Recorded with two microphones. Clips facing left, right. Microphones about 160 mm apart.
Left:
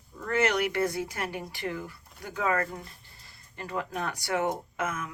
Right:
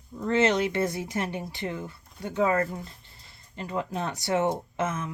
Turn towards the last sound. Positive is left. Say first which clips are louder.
# right 3 dB
turn(degrees=-25)  # may be behind; listen again after turning